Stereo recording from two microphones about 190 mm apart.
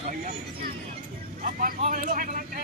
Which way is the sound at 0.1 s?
45° right (ahead or behind).